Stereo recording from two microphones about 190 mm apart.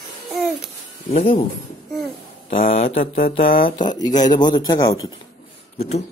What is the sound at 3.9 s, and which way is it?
Music, 20° left (ahead or behind).